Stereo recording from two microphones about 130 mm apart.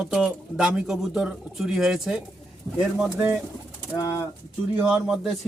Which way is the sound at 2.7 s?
25° left (ahead or behind).